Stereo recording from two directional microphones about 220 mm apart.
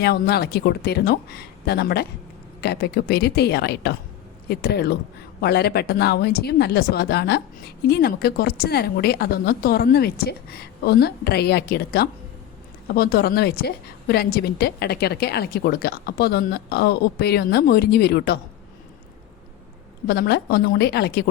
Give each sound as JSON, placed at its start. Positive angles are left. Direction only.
{"t": 0.0, "sound": "speech", "side_deg": 45}
{"t": 20.1, "sound": "speech", "side_deg": 45}